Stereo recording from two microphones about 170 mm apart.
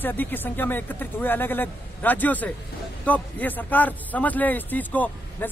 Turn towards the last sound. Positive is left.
turn(degrees=10)  # may be behind; listen again after turning